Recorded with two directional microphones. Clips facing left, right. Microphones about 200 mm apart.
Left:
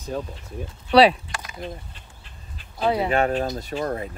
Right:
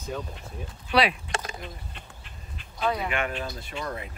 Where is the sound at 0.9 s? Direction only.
30° left (ahead or behind).